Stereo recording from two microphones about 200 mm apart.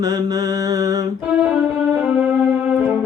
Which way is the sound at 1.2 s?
5° right (ahead or behind).